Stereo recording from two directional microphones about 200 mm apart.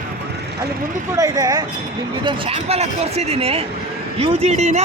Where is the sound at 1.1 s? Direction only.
20° right (ahead or behind); by 4.8 s 35° right (ahead or behind).